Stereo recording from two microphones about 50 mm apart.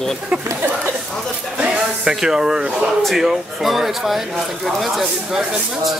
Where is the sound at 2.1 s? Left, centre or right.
Centre.